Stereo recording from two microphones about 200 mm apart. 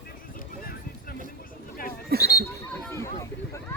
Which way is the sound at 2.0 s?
50° right (ahead or behind).